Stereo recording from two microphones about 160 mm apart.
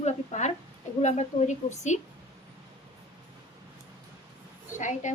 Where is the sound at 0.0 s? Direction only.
45° left (ahead or behind).